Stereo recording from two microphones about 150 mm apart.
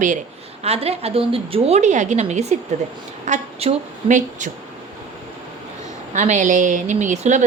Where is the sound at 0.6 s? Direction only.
40° right (ahead or behind).